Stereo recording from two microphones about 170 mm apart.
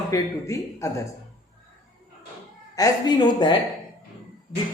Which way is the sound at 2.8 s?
25° left (ahead or behind).